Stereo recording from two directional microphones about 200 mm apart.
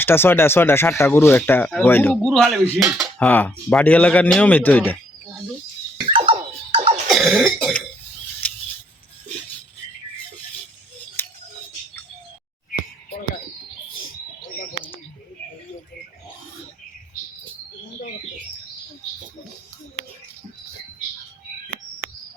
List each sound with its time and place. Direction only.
0.0 s speech: 10° left (ahead or behind)
2.3 s speech: centre (ahead or behind)
3.2 s speech: 10° left (ahead or behind)
6.1 s scratching: 25° right (ahead or behind)
7.1 s throat clearing: centre (ahead or behind)
8.4 s a sound: 5° left (ahead or behind)
11.2 s scissors: 10° left (ahead or behind)